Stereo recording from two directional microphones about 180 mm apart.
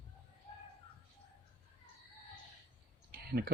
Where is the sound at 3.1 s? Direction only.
60° right (ahead or behind).